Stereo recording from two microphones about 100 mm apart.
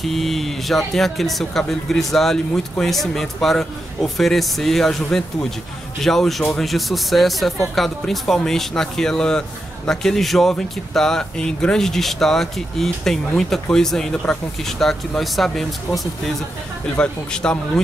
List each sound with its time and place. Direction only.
0.0 s speech: centre (ahead or behind)